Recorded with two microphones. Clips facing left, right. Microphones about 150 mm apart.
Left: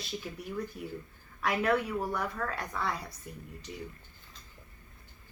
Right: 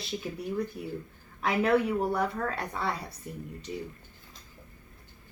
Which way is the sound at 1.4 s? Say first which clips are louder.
Right 4 dB; 30° right (ahead or behind).